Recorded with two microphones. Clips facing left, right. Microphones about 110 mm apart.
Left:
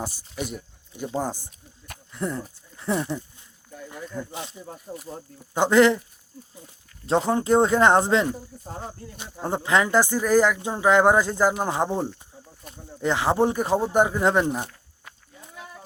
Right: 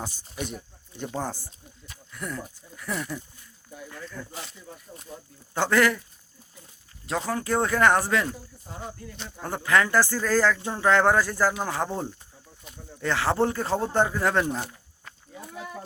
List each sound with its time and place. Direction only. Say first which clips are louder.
0.4 s speech: left 2 dB; 10° left (ahead or behind)
4.6 s speech: left 7 dB; 40° left (ahead or behind)
5.5 s speech: left 5 dB; 20° left (ahead or behind)
7.0 s speech: left 7 dB; 25° left (ahead or behind)
9.1 s speech: left 7 dB; 15° left (ahead or behind)